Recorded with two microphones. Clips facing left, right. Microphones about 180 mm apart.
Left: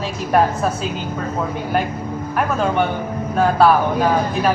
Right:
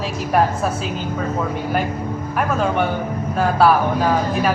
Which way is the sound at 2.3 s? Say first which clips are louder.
Left 1 dB; centre (ahead or behind).